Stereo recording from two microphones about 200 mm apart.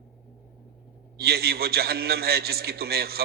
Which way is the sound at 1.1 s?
50° right (ahead or behind).